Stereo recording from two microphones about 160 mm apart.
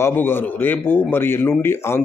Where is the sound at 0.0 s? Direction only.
15° left (ahead or behind).